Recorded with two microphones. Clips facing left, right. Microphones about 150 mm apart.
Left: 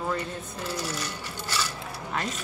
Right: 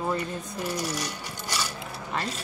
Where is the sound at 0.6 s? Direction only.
15° right (ahead or behind).